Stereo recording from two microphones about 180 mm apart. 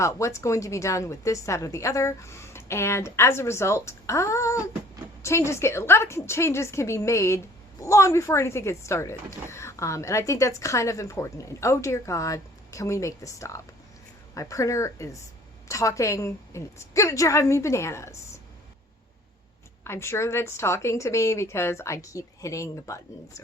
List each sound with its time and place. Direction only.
0.0 s a woman's voice: 15° left (ahead or behind)
19.8 s a woman's voice: 15° left (ahead or behind)